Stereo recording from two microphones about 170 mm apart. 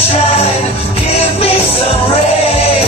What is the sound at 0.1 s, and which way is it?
Music, 35° left (ahead or behind).